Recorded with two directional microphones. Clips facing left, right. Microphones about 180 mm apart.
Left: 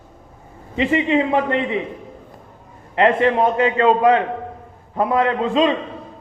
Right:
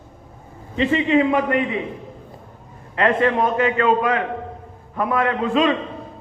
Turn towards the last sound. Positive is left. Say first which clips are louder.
# left 1 dB
turn(degrees=25)  # may be behind; listen again after turning